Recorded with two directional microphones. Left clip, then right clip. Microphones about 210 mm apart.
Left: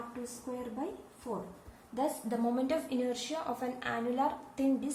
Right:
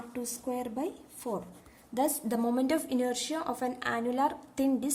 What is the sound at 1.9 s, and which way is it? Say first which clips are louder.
A woman's voice: right 4 dB; 35° right (ahead or behind).